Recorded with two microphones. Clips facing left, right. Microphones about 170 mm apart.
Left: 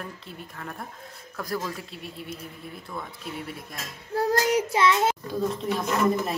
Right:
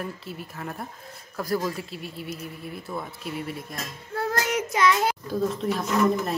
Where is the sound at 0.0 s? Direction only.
5° right (ahead or behind).